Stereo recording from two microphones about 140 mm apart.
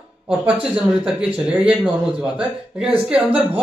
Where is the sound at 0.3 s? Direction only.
5° right (ahead or behind).